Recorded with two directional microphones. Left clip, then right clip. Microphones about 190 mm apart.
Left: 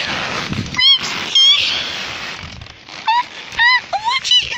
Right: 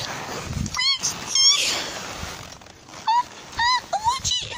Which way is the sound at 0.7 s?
5° right (ahead or behind).